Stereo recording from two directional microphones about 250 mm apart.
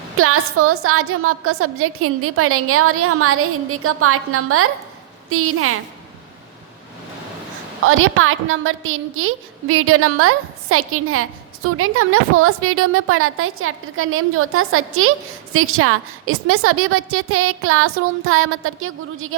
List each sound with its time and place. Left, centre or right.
0.2 s a woman's voice: right
7.9 s a woman's voice: right